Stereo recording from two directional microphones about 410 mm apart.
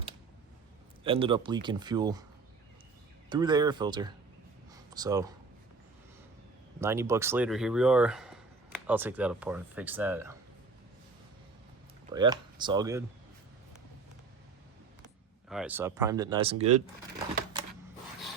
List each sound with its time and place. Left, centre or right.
1.0 s speech: centre
3.2 s speech: centre
6.7 s speech: centre
12.1 s speech: centre
15.4 s speech: centre